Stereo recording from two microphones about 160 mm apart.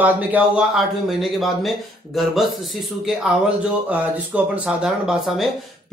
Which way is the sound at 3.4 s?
10° right (ahead or behind).